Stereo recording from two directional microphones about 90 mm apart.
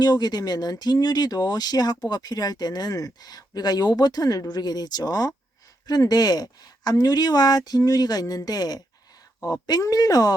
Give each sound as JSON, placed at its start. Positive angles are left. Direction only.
{"t": 0.0, "sound": "speech", "side_deg": 50}